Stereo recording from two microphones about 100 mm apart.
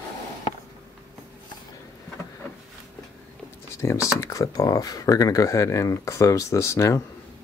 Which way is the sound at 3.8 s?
30° left (ahead or behind).